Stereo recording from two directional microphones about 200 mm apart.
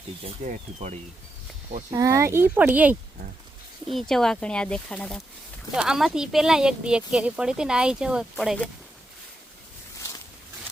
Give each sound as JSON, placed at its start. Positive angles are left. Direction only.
{"t": 0.4, "sound": "speech", "side_deg": -35}
{"t": 1.9, "sound": "speech", "side_deg": -15}